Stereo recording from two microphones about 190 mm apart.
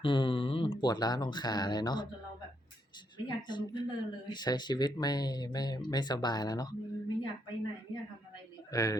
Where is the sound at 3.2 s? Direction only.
25° left (ahead or behind).